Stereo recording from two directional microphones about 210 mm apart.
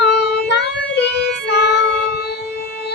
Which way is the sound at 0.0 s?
55° left (ahead or behind).